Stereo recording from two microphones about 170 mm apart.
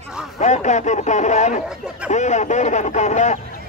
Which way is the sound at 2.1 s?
45° left (ahead or behind).